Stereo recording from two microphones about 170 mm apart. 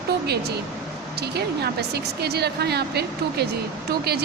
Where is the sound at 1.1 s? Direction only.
70° right (ahead or behind).